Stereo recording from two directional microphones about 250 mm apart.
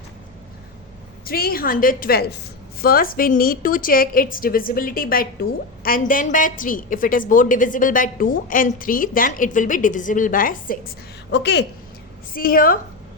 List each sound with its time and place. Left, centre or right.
1.2 s a woman's voice: left